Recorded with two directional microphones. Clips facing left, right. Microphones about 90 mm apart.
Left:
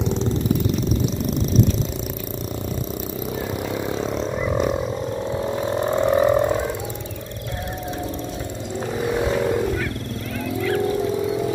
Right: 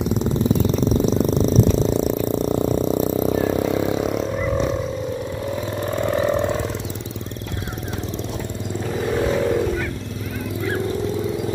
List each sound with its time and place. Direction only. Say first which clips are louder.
0.0 s jackhammer: right 1 dB; 10° right (ahead or behind)
0.6 s jackhammer: right 3 dB; 35° right (ahead or behind)
1.3 s purr: right 3 dB; centre (ahead or behind)
1.8 s purr: right 8 dB; 40° right (ahead or behind)
2.2 s a sound: right 9 dB; 30° right (ahead or behind)
3.8 s a sound: right 3 dB; 15° right (ahead or behind)
4.4 s wild animals: left 2 dB; 5° left (ahead or behind)
5.9 s a sound: left 3 dB; 20° left (ahead or behind)
9.0 s vehicle: right 1 dB; 10° left (ahead or behind)